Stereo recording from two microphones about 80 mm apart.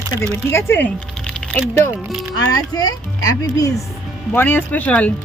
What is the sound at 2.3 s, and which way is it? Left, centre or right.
Speech, left.